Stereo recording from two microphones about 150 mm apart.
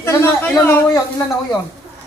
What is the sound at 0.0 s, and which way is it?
A man's voice, 15° left (ahead or behind).